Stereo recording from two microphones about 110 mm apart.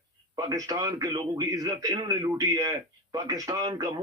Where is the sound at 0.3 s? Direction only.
35° right (ahead or behind).